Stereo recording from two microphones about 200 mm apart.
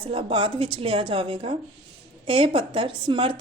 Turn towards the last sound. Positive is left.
turn(degrees=-25)  # may be behind; listen again after turning